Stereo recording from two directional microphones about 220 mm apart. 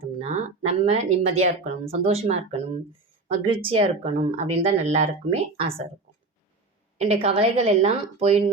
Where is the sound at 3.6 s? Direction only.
25° right (ahead or behind).